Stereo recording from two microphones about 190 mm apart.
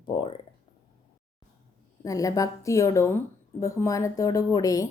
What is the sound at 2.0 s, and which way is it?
A woman's voice, 20° left (ahead or behind).